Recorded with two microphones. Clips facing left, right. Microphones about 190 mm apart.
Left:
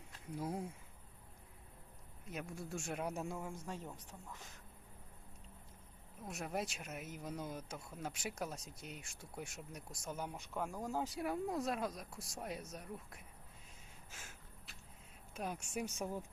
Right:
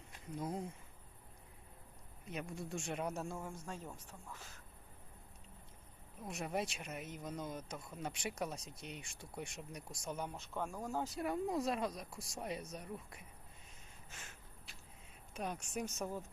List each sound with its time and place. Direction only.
0.3 s speech: 10° left (ahead or behind)
2.2 s speech: centre (ahead or behind)
6.2 s speech: centre (ahead or behind)
11.2 s speech: centre (ahead or behind)
14.1 s a sound: 5° left (ahead or behind)
15.3 s speech: centre (ahead or behind)